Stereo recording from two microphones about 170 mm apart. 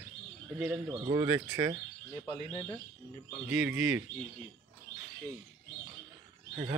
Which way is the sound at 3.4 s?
5° right (ahead or behind).